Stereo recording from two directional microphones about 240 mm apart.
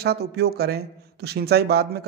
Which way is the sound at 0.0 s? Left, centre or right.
Right.